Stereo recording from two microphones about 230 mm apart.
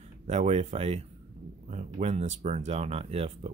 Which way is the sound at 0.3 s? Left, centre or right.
Right.